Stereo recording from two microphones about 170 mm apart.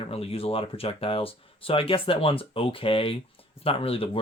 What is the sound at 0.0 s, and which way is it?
Speech, 35° left (ahead or behind).